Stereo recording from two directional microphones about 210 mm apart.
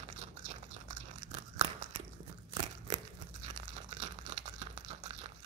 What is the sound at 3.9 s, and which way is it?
Crumpling, 35° right (ahead or behind).